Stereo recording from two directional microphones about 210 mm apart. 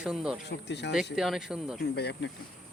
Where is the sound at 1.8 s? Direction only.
50° left (ahead or behind).